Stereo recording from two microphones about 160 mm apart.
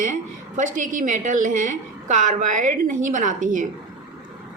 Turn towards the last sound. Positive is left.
turn(degrees=-55)  # may be behind; listen again after turning